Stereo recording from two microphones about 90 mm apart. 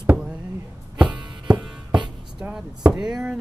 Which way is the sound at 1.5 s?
15° right (ahead or behind).